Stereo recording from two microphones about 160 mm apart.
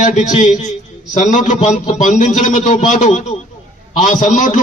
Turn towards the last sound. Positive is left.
turn(degrees=55)  # may be behind; listen again after turning